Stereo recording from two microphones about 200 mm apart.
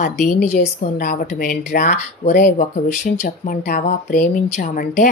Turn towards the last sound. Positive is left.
turn(degrees=45)  # may be behind; listen again after turning